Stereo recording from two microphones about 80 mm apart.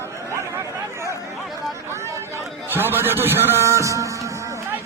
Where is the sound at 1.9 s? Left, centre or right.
Right.